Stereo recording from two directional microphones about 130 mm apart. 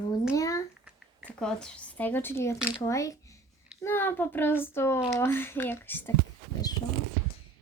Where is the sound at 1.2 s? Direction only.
10° left (ahead or behind).